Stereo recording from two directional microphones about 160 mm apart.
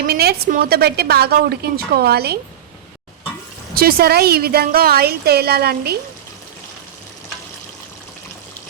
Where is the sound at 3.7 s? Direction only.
75° right (ahead or behind).